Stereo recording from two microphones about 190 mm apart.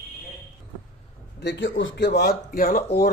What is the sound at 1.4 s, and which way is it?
Speech, 70° left (ahead or behind).